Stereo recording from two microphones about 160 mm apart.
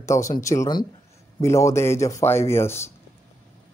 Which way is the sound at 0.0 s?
20° left (ahead or behind).